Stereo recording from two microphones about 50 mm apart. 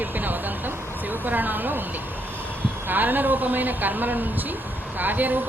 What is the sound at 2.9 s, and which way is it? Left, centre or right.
Speech, right.